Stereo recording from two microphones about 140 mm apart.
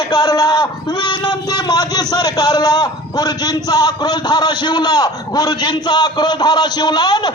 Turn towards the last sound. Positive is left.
turn(degrees=30)  # may be behind; listen again after turning